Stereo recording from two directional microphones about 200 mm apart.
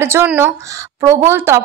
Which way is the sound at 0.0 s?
10° right (ahead or behind).